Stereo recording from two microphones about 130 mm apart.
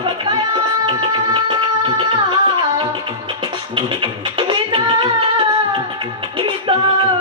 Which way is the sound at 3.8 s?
40° right (ahead or behind).